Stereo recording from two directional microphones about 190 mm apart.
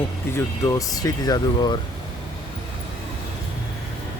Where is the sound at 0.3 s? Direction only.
15° left (ahead or behind).